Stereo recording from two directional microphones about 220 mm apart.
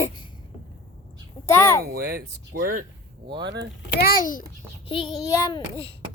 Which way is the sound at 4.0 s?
40° left (ahead or behind).